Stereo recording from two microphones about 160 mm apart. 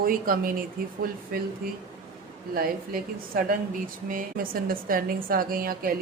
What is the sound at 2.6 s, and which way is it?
A woman's voice, 65° right (ahead or behind).